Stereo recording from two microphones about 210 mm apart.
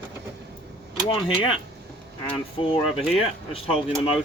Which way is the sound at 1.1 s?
25° left (ahead or behind).